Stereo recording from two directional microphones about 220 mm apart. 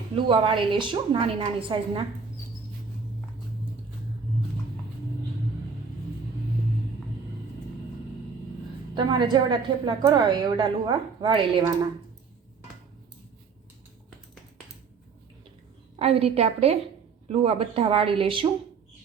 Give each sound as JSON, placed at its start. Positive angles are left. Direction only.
{"t": 0.3, "sound": "a woman's voice", "side_deg": -25}
{"t": 9.0, "sound": "a woman's voice", "side_deg": -20}
{"t": 16.0, "sound": "a woman's voice", "side_deg": -25}